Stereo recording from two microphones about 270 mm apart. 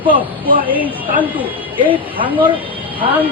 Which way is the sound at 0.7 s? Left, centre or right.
Centre.